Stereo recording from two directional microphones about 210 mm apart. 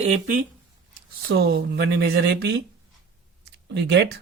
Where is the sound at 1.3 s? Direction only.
45° right (ahead or behind).